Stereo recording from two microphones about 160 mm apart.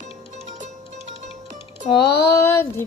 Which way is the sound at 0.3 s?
50° right (ahead or behind).